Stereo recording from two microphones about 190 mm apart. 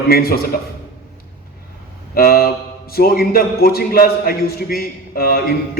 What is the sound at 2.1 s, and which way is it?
A man's voice, 50° left (ahead or behind).